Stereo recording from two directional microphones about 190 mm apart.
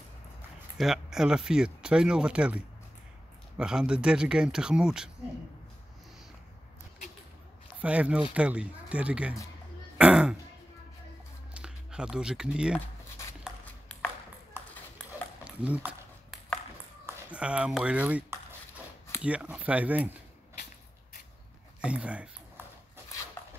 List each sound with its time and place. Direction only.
0.7 s speech: centre (ahead or behind)
7.8 s speech: 5° right (ahead or behind)
9.9 s throat clearing: 5° right (ahead or behind)
11.5 s speech: 5° right (ahead or behind)
13.7 s ping: 5° left (ahead or behind)
15.4 s a sound: 5° right (ahead or behind)
17.0 s speech: 5° right (ahead or behind)
21.8 s speech: 5° right (ahead or behind)